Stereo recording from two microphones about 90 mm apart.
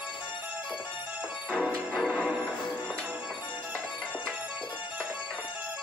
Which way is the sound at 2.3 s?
20° right (ahead or behind).